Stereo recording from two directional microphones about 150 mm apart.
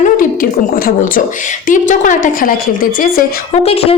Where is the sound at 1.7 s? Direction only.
60° left (ahead or behind).